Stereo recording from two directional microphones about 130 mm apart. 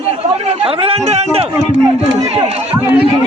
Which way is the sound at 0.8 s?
50° right (ahead or behind).